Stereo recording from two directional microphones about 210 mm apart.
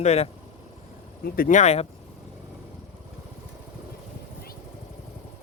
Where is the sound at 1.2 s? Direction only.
45° left (ahead or behind).